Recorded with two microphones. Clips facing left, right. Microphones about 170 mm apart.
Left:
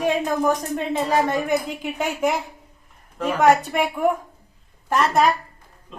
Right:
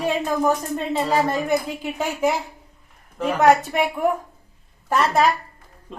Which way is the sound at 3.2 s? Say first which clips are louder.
Right 1 dB; centre (ahead or behind).